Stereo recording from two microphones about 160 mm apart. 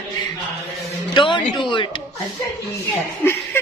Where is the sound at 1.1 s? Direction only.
30° left (ahead or behind).